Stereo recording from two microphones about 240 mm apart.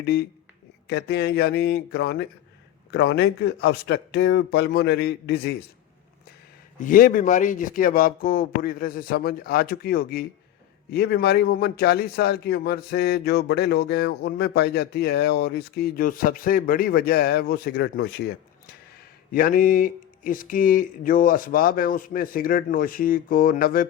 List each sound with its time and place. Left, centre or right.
0.0 s a man's voice: left
6.7 s a man's voice: left
19.3 s a man's voice: left